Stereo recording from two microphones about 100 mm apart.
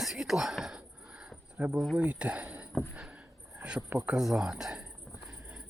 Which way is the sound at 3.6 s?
10° right (ahead or behind).